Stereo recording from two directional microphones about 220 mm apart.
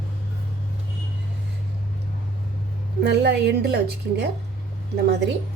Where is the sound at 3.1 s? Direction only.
50° right (ahead or behind).